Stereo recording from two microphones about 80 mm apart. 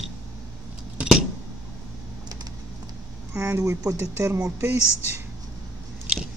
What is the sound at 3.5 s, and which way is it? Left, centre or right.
Speech, right.